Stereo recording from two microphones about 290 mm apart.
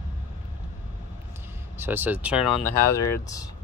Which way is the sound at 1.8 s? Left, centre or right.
Centre.